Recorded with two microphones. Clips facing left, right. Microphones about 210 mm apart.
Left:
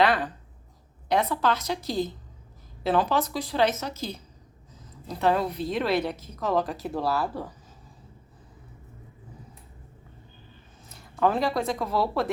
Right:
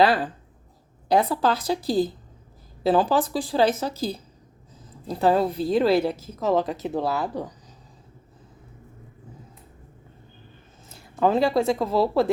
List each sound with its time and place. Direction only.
0.0 s a woman's voice: 30° right (ahead or behind)
10.8 s speech: 25° right (ahead or behind)